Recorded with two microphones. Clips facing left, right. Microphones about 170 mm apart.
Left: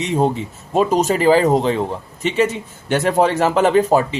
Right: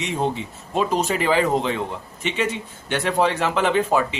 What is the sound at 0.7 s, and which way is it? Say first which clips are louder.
Speech: left 6 dB; 40° left (ahead or behind).